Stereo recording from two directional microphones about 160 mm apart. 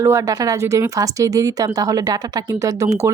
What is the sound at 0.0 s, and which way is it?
A woman's voice, 20° right (ahead or behind).